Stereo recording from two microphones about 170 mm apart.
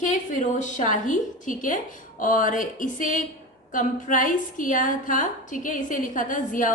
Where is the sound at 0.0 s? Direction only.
50° left (ahead or behind).